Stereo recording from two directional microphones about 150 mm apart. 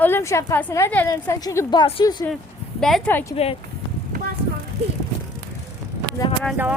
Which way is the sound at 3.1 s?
15° left (ahead or behind).